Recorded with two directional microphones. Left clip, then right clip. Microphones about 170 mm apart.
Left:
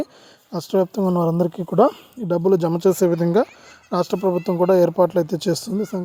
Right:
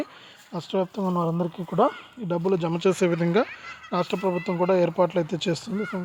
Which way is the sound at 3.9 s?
35° left (ahead or behind).